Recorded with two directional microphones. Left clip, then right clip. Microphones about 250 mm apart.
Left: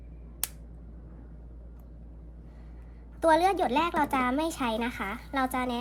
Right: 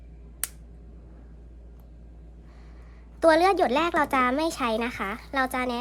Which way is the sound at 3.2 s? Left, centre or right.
Right.